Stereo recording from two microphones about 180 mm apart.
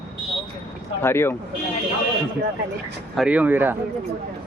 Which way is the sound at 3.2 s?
5° right (ahead or behind).